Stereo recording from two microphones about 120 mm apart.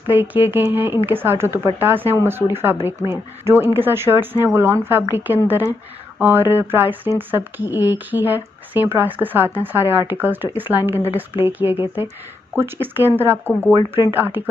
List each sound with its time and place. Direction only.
0.1 s speech: 15° right (ahead or behind)